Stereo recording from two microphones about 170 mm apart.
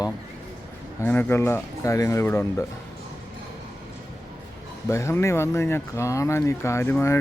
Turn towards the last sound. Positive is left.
turn(degrees=15)  # may be behind; listen again after turning